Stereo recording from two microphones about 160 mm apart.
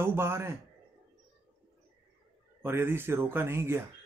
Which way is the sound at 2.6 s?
15° right (ahead or behind).